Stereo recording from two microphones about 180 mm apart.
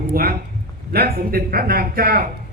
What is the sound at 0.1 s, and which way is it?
Speech, 55° right (ahead or behind).